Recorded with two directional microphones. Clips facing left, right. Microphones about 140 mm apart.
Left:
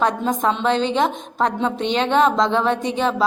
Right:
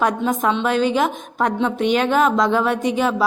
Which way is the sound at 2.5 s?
5° right (ahead or behind).